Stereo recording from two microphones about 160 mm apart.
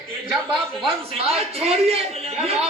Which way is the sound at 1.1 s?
40° right (ahead or behind).